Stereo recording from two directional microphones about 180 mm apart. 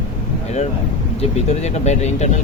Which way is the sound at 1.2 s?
40° left (ahead or behind).